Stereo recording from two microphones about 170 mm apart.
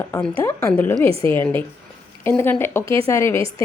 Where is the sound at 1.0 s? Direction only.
35° right (ahead or behind).